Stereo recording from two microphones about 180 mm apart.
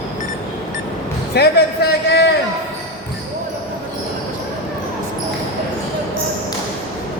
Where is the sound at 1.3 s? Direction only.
65° left (ahead or behind).